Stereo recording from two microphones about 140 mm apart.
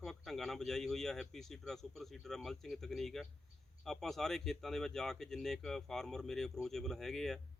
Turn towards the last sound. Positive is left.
turn(degrees=0)  # may be behind; listen again after turning